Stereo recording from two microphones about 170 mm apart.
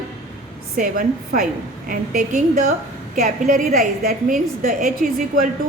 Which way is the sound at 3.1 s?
55° right (ahead or behind).